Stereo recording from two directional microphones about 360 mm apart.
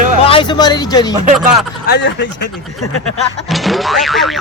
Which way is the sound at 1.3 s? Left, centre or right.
Centre.